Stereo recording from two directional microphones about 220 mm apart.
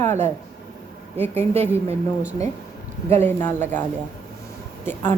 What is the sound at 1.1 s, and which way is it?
Speech, 30° right (ahead or behind).